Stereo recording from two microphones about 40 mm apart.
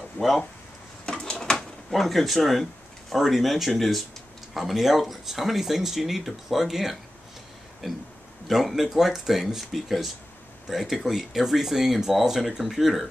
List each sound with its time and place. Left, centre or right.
0.2 s speech: left
1.0 s a sound: centre
1.9 s speech: centre